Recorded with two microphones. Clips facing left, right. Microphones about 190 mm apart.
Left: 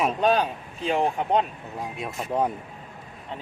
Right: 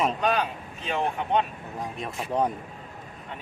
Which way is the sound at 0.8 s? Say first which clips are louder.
Left 4 dB; 35° left (ahead or behind).